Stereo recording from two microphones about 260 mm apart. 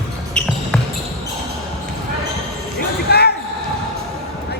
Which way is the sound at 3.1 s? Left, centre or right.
Left.